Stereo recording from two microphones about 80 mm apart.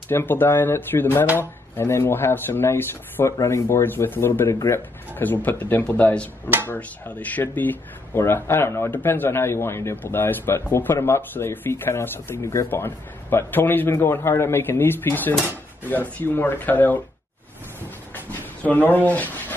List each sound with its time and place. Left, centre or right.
0.1 s speech: left
18.1 s a sound: left
19.0 s speech: left